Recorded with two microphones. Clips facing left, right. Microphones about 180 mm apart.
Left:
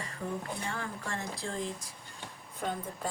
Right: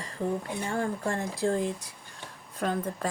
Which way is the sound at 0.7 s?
45° right (ahead or behind).